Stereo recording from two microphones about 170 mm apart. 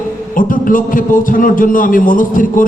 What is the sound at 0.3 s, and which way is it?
A man's voice, 55° left (ahead or behind).